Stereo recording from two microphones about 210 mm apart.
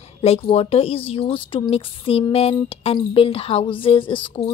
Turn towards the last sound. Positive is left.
turn(degrees=25)  # may be behind; listen again after turning